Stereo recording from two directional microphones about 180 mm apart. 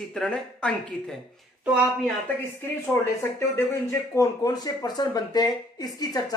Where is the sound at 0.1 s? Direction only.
5° left (ahead or behind).